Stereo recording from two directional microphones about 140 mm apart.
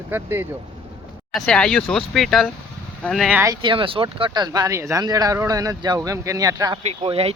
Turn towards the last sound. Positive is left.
turn(degrees=-45)  # may be behind; listen again after turning